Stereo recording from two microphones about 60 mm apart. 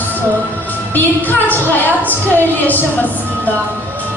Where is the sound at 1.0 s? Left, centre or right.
Left.